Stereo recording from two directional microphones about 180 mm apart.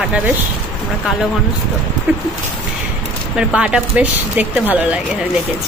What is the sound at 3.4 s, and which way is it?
Speech, 5° right (ahead or behind).